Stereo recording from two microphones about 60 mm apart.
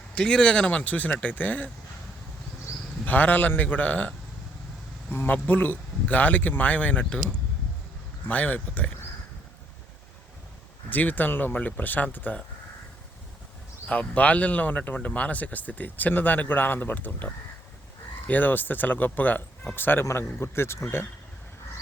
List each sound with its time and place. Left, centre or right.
0.1 s speech: centre
3.0 s speech: left
5.1 s speech: left
8.3 s speech: left
10.8 s speech: left
13.8 s speech: left